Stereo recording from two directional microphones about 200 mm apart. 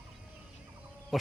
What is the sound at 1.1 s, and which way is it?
Frog, centre (ahead or behind).